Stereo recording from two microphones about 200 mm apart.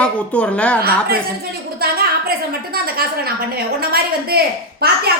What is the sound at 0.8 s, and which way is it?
Speech, 50° right (ahead or behind).